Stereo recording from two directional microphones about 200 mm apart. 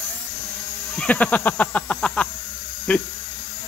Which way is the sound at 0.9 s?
5° left (ahead or behind).